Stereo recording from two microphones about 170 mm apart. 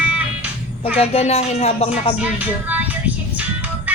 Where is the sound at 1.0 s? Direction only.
35° left (ahead or behind).